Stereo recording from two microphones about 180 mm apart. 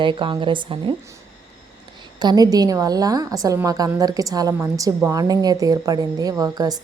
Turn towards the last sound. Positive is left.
turn(degrees=-20)  # may be behind; listen again after turning